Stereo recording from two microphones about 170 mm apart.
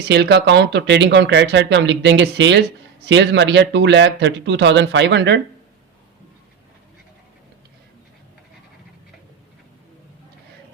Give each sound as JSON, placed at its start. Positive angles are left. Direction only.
{"t": 0.1, "sound": "speech", "side_deg": -85}